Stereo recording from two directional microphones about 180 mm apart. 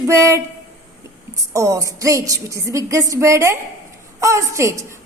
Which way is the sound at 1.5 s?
15° right (ahead or behind).